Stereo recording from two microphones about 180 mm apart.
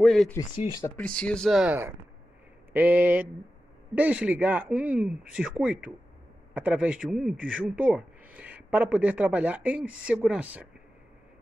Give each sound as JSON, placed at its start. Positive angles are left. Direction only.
{"t": 0.0, "sound": "speech", "side_deg": 0}
{"t": 0.7, "sound": "speech", "side_deg": 20}
{"t": 0.9, "sound": "a man's voice", "side_deg": 5}